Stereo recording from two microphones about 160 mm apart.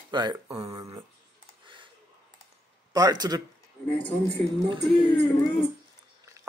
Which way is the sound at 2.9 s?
25° right (ahead or behind).